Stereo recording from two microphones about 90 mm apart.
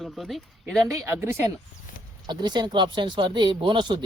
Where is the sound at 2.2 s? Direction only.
55° right (ahead or behind).